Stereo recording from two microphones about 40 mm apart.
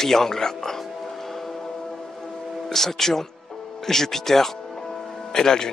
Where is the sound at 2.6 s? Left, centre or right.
Centre.